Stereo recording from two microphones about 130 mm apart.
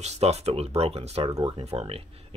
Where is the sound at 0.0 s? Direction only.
55° right (ahead or behind).